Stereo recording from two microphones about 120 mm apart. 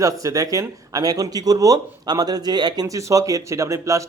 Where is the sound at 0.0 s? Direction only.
30° right (ahead or behind).